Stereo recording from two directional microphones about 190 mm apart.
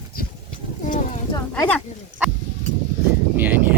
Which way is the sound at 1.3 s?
15° left (ahead or behind).